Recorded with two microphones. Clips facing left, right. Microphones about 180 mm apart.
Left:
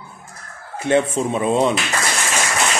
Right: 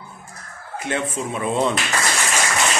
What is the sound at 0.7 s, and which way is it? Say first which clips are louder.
Speech: left 7 dB; 30° left (ahead or behind).